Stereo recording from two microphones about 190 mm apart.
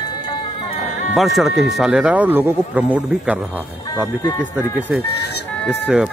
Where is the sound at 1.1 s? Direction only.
Centre (ahead or behind).